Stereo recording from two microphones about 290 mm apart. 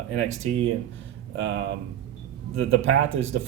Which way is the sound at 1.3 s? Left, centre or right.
Right.